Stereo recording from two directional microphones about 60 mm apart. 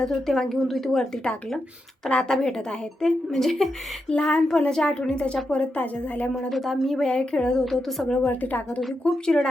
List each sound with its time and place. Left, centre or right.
0.0 s a woman's voice: centre
2.0 s a woman's voice: centre
4.1 s a woman's voice: centre
6.5 s a woman's voice: centre
7.1 s a woman's voice: centre
7.6 s a woman's voice: centre
8.3 s a woman's voice: left
8.8 s a woman's voice: centre